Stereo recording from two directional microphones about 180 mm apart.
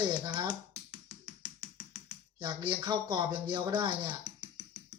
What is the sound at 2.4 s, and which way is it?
Speech, 25° right (ahead or behind).